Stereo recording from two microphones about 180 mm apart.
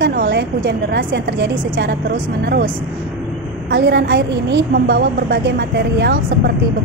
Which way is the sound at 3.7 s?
65° right (ahead or behind).